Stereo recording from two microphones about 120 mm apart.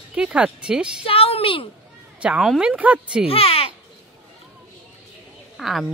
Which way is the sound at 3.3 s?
55° left (ahead or behind).